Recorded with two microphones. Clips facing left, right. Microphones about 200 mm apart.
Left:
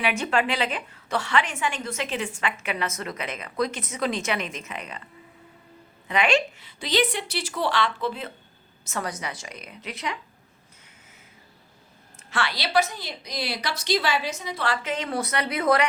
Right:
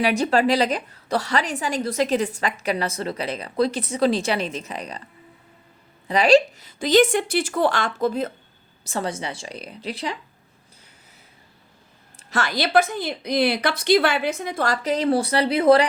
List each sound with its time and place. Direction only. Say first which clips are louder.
0.0 s a woman's voice: right 5 dB; 35° right (ahead or behind)
6.1 s a woman's voice: right 7 dB; 35° right (ahead or behind)
8.8 s a woman's voice: right 4 dB; 30° right (ahead or behind)
12.3 s a woman's voice: right 5 dB; 45° right (ahead or behind)